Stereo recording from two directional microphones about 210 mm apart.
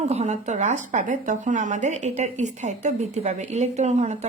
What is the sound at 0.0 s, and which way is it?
Speech, 30° right (ahead or behind).